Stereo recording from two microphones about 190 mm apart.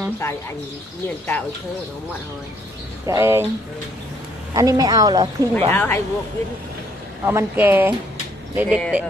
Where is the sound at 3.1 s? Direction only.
15° right (ahead or behind).